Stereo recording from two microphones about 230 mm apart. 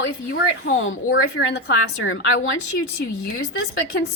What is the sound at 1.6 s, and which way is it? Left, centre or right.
Speech, left.